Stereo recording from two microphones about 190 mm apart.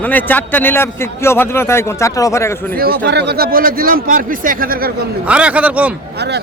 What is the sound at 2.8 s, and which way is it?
Speech, 60° right (ahead or behind).